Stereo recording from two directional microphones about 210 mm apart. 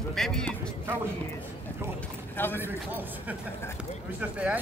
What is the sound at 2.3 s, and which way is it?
Run, 10° left (ahead or behind).